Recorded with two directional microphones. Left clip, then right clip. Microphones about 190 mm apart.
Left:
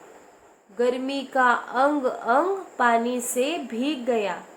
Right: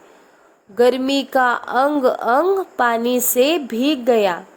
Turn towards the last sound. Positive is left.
turn(degrees=-60)  # may be behind; listen again after turning